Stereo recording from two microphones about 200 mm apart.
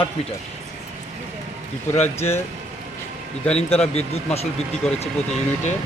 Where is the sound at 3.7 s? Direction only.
30° left (ahead or behind).